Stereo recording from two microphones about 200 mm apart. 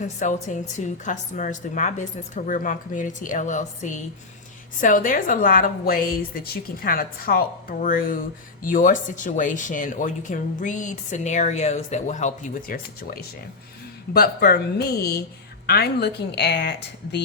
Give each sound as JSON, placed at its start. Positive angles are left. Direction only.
{"t": 0.0, "sound": "a woman's voice", "side_deg": 40}
{"t": 14.1, "sound": "a woman's voice", "side_deg": 50}